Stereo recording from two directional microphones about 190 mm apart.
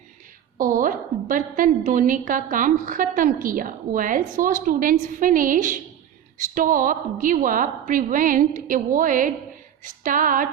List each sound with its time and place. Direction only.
0.6 s a woman's voice: 45° right (ahead or behind)